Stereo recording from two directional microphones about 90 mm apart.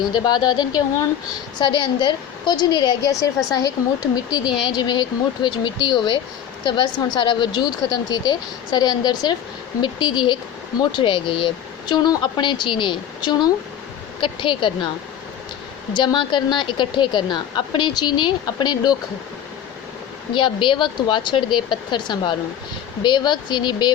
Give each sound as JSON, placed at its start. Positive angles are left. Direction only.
{"t": 0.1, "sound": "a woman's voice", "side_deg": 55}
{"t": 15.9, "sound": "a woman's voice", "side_deg": 55}
{"t": 20.3, "sound": "a woman's voice", "side_deg": 65}